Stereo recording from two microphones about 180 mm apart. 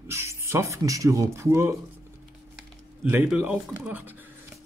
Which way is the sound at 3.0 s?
10° right (ahead or behind).